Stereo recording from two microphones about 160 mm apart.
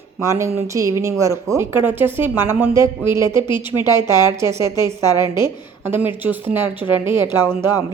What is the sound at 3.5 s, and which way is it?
Speech, 30° left (ahead or behind).